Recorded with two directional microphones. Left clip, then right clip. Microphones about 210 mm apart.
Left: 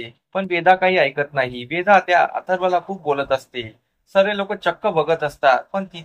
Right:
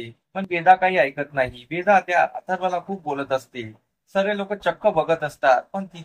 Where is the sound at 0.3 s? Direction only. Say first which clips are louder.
Left 1 dB; 20° left (ahead or behind).